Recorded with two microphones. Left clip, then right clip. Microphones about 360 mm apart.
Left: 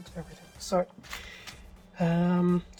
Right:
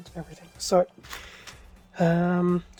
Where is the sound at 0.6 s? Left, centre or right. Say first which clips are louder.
Right 6 dB; right.